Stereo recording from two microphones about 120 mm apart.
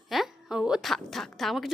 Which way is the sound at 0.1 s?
Centre (ahead or behind).